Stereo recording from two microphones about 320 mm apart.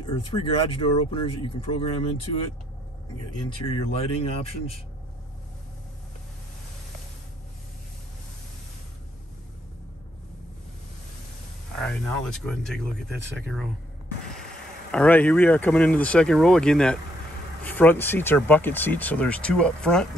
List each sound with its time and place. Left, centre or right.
0.0 s speech: centre
3.4 s speech: centre
11.8 s speech: centre
14.9 s speech: centre